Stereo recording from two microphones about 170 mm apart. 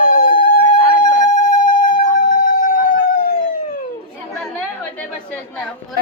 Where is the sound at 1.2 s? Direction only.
50° left (ahead or behind).